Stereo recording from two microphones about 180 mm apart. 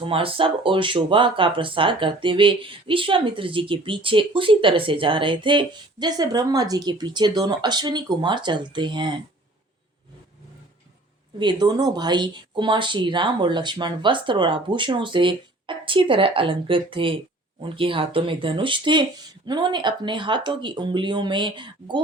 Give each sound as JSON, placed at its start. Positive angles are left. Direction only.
{"t": 0.0, "sound": "speech", "side_deg": -30}
{"t": 11.3, "sound": "speech", "side_deg": -25}